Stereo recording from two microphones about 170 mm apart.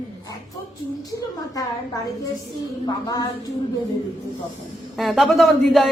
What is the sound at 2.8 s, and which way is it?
Speech, 25° left (ahead or behind).